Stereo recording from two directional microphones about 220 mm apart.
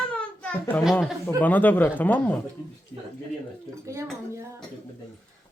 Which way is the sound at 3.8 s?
15° right (ahead or behind).